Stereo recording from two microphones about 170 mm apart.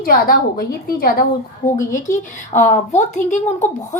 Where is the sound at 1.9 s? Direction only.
45° left (ahead or behind).